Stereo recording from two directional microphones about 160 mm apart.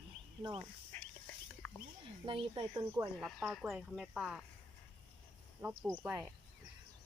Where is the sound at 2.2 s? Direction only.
30° right (ahead or behind).